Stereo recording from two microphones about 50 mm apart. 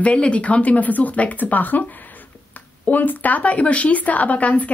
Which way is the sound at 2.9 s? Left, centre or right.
Left.